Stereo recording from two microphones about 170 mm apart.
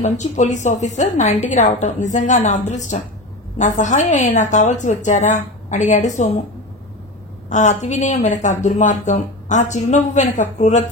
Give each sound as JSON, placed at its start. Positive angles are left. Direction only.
{"t": 0.0, "sound": "a woman's voice", "side_deg": 45}
{"t": 7.4, "sound": "a woman's voice", "side_deg": 45}